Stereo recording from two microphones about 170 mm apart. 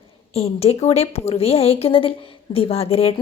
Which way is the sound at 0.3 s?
35° left (ahead or behind).